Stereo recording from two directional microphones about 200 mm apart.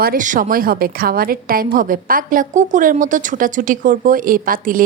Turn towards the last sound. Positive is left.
turn(degrees=-45)  # may be behind; listen again after turning